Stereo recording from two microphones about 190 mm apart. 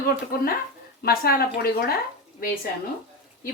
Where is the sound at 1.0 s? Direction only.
55° left (ahead or behind).